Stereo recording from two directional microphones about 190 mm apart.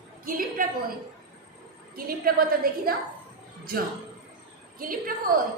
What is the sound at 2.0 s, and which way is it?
Speech, 50° right (ahead or behind).